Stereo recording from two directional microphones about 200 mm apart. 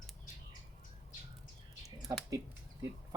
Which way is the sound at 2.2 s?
15° right (ahead or behind).